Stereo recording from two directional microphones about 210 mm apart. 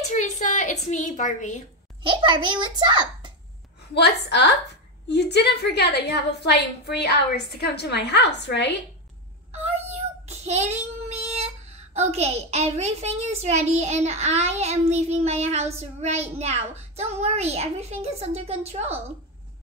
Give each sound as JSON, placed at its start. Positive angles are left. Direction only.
{"t": 0.1, "sound": "a woman's voice", "side_deg": 35}
{"t": 2.0, "sound": "a child's voice", "side_deg": -20}
{"t": 3.9, "sound": "a woman's voice", "side_deg": 55}
{"t": 9.5, "sound": "a child's voice", "side_deg": -30}